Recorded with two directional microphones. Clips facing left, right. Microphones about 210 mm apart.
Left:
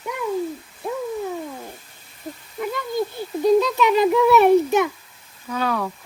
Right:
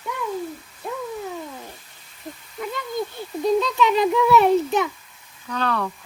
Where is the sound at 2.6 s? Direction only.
5° left (ahead or behind).